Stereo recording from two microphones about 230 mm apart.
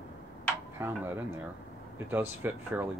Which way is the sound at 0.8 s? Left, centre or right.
Centre.